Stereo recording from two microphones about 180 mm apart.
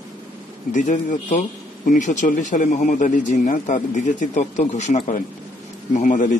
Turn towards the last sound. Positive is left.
turn(degrees=45)  # may be behind; listen again after turning